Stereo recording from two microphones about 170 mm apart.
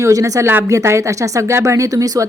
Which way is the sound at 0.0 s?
20° right (ahead or behind).